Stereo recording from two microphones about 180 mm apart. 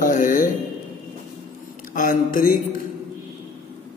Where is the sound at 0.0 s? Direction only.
45° left (ahead or behind).